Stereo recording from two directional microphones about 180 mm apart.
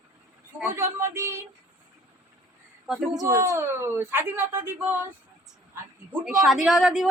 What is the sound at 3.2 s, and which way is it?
Speech, 15° right (ahead or behind).